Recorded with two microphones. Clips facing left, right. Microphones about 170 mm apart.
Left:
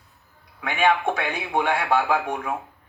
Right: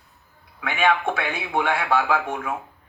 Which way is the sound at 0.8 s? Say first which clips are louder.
Even; 15° left (ahead or behind).